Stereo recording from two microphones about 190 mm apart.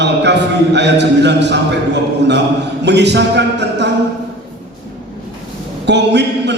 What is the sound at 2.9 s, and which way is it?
A man's voice, 65° right (ahead or behind).